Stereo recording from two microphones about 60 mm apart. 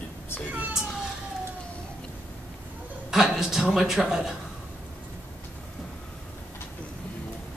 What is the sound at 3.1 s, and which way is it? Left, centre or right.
A man's voice, centre.